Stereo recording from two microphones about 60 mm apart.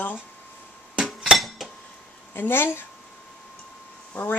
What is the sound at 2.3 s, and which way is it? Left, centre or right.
Speech, left.